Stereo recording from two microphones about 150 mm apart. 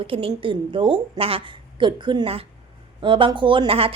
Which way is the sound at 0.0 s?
35° right (ahead or behind).